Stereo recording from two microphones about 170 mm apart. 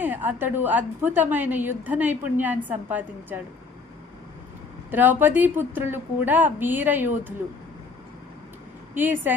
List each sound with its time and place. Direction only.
0.0 s a woman's voice: 10° right (ahead or behind)
4.9 s a woman's voice: 10° right (ahead or behind)
9.0 s a woman's voice: 10° right (ahead or behind)